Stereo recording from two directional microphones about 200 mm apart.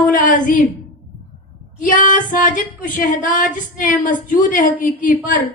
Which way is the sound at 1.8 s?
40° left (ahead or behind).